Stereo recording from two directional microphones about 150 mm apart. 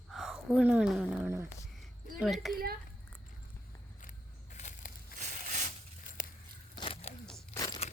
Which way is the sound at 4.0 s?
55° left (ahead or behind).